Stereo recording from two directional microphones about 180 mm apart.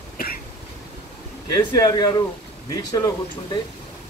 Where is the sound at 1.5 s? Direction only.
20° left (ahead or behind).